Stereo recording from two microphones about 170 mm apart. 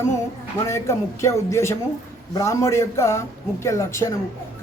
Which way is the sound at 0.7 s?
15° left (ahead or behind).